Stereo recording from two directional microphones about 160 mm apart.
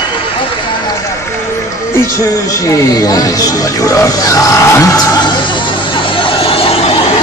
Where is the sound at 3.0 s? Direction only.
20° left (ahead or behind).